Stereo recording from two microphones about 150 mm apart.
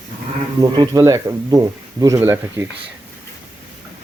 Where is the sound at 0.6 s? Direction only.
25° right (ahead or behind).